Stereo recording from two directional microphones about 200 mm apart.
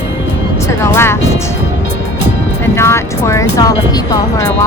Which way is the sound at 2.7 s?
15° left (ahead or behind).